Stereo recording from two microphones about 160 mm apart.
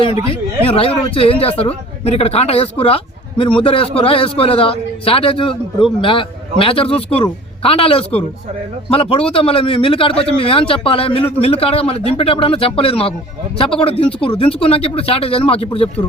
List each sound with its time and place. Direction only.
0.3 s a man's voice: 35° left (ahead or behind)